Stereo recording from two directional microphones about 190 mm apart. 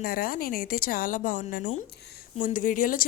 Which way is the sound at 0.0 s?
50° left (ahead or behind).